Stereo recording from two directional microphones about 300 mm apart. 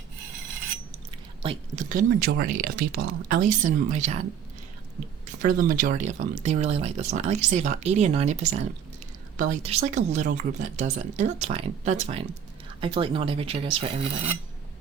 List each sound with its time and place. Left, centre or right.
1.4 s speech: right
5.2 s speech: right